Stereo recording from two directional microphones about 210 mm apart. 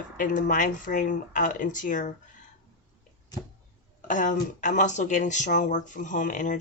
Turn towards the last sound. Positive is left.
turn(degrees=35)  # may be behind; listen again after turning